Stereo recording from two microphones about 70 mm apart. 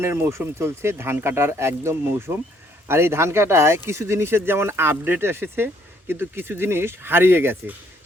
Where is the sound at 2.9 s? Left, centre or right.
Right.